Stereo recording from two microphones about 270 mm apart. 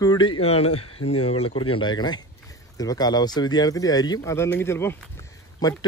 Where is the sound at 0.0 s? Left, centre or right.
Centre.